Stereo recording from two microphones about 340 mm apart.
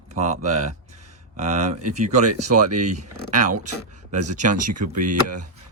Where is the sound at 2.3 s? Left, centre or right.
Right.